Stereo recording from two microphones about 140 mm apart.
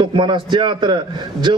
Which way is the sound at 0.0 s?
35° right (ahead or behind).